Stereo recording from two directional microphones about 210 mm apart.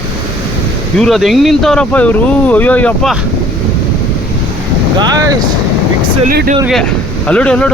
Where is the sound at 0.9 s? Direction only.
Centre (ahead or behind).